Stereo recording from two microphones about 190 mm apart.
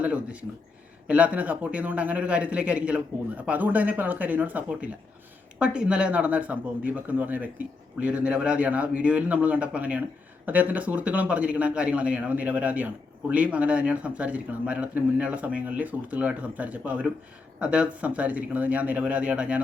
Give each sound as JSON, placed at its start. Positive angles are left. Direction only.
{"t": 0.0, "sound": "a man's voice", "side_deg": -5}